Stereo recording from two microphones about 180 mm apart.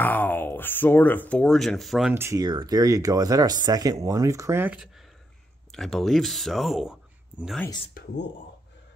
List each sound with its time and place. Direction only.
0.0 s speech: 10° left (ahead or behind)
2.1 s speech: 15° right (ahead or behind)
5.7 s speech: centre (ahead or behind)